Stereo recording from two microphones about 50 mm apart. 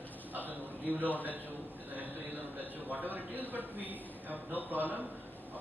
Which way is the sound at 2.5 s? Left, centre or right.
Right.